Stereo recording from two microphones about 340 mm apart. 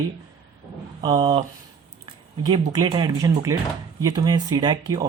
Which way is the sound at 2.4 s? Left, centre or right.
Centre.